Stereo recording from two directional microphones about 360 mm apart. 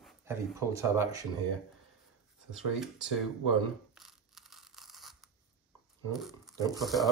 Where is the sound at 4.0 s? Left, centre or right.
Centre.